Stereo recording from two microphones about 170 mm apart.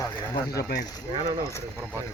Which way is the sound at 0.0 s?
15° left (ahead or behind).